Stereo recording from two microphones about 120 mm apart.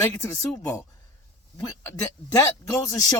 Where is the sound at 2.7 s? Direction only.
30° left (ahead or behind).